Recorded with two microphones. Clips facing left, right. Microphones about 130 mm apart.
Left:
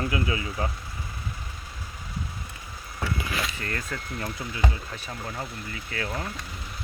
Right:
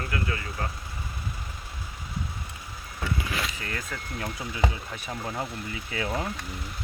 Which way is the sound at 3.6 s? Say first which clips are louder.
Left 2 dB; 10° right (ahead or behind).